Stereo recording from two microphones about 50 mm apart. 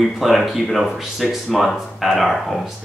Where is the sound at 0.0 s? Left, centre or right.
Centre.